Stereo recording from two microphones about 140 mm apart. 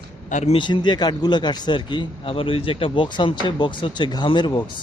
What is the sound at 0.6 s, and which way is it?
A man's voice, 35° left (ahead or behind).